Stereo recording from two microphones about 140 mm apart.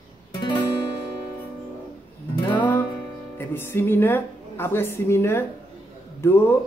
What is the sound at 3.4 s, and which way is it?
A woman's voice, 15° left (ahead or behind).